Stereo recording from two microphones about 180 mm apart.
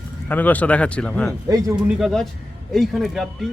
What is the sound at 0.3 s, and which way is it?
Speech, 10° left (ahead or behind).